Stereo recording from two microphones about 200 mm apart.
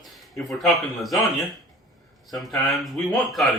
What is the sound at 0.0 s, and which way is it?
A man's voice, centre (ahead or behind).